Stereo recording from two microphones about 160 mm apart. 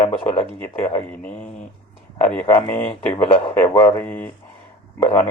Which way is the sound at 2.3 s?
10° left (ahead or behind).